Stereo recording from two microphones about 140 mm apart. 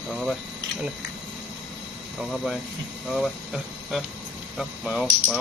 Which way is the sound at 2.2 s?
Centre (ahead or behind).